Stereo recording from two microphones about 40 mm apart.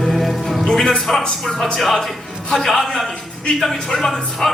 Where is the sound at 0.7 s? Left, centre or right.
Centre.